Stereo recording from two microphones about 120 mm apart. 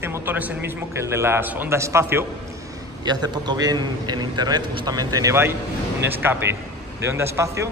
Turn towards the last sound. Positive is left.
turn(degrees=-20)  # may be behind; listen again after turning